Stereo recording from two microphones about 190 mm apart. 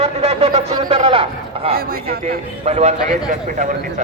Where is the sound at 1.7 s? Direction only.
50° right (ahead or behind).